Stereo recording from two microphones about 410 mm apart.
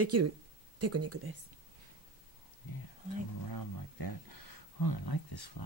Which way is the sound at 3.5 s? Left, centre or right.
Left.